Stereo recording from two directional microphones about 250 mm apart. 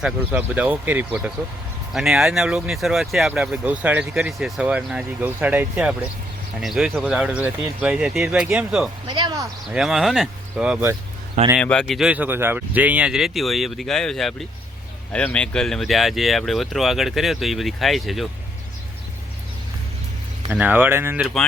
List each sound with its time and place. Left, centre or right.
0.0 s speech: centre
9.0 s speech: centre
9.7 s speech: centre
20.5 s speech: centre